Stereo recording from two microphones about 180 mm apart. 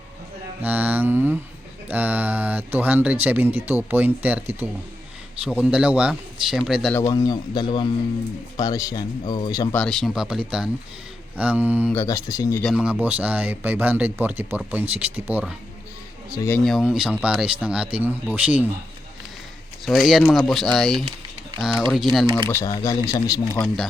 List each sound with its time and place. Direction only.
0.6 s a man's voice: 10° right (ahead or behind)
6.9 s speech: 20° left (ahead or behind)
9.7 s a man's voice: 5° left (ahead or behind)
11.9 s speech: 15° left (ahead or behind)
12.6 s speech: 5° right (ahead or behind)
19.8 s a man's voice: centre (ahead or behind)
22.4 s speech: 15° left (ahead or behind)
23.6 s a man's voice: centre (ahead or behind)